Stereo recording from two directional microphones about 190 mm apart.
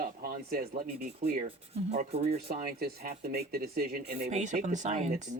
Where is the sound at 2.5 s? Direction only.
50° right (ahead or behind).